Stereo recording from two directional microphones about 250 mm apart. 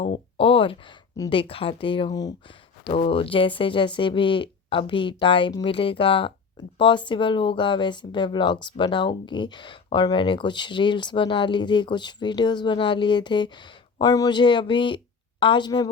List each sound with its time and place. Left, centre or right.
0.3 s speech: left